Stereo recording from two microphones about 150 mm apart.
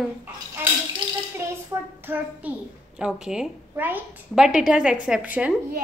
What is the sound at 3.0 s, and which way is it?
A woman's voice, 5° right (ahead or behind).